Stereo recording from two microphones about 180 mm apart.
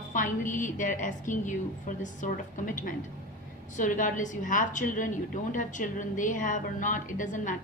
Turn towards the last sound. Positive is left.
turn(degrees=45)  # may be behind; listen again after turning